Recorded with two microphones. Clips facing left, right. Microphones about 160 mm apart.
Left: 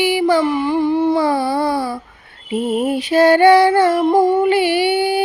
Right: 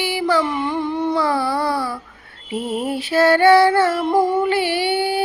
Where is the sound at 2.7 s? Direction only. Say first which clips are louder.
Left 4 dB; 15° left (ahead or behind).